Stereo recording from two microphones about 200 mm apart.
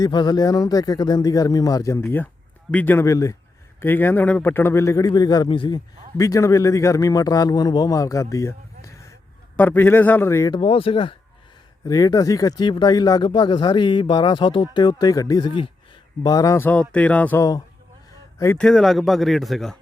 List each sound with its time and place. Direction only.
0.0 s a man's voice: 20° left (ahead or behind); by 19.8 s centre (ahead or behind)